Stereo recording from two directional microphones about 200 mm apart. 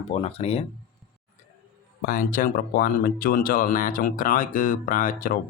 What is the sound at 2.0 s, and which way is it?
Speech, 45° left (ahead or behind).